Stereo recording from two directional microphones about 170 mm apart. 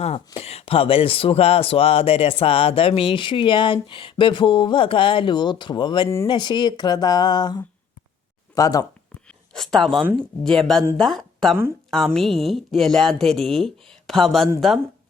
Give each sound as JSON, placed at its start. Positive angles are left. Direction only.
{"t": 0.3, "sound": "speech", "side_deg": 35}
{"t": 9.5, "sound": "speech", "side_deg": 0}